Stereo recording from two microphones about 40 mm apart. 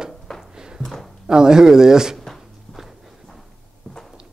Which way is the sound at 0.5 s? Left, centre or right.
Centre.